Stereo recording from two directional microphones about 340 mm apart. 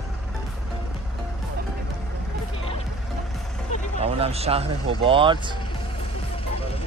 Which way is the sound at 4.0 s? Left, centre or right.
Centre.